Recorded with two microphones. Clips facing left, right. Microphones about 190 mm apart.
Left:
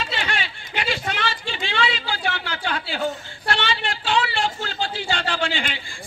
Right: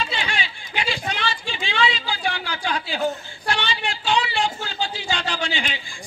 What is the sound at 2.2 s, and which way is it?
Speech, 15° right (ahead or behind).